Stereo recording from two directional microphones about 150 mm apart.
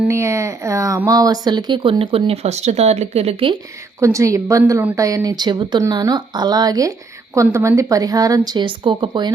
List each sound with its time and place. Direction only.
0.0 s speech: 20° right (ahead or behind); by 3.5 s 45° right (ahead or behind)
4.0 s a woman's voice: 20° right (ahead or behind)